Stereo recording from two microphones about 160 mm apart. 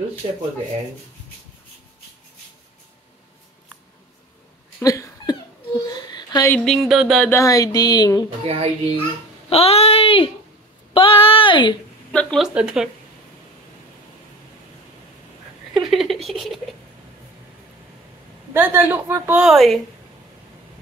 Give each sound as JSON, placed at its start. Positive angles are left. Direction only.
{"t": 4.7, "sound": "cat", "side_deg": 20}
{"t": 5.9, "sound": "a sound", "side_deg": 25}
{"t": 6.5, "sound": "speech", "side_deg": 0}
{"t": 7.2, "sound": "a sound", "side_deg": 20}
{"t": 8.5, "sound": "a child's voice", "side_deg": -40}
{"t": 9.5, "sound": "speech", "side_deg": 40}
{"t": 12.1, "sound": "speech", "side_deg": 5}
{"t": 15.7, "sound": "a sound", "side_deg": 0}
{"t": 16.3, "sound": "speech", "side_deg": 0}
{"t": 18.5, "sound": "speech", "side_deg": -15}
{"t": 19.4, "sound": "speech", "side_deg": 0}